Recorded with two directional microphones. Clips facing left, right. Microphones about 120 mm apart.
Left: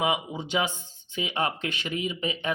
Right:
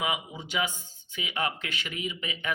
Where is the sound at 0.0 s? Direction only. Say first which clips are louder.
Left 5 dB; 25° left (ahead or behind).